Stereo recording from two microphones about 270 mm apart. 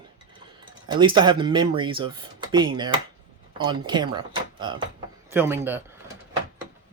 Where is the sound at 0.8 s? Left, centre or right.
Centre.